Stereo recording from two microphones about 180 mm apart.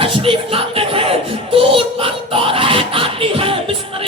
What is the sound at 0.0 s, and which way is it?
Music, 30° right (ahead or behind).